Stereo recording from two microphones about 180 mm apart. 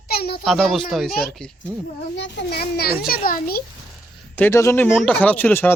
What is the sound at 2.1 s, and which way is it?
A child's voice, 80° left.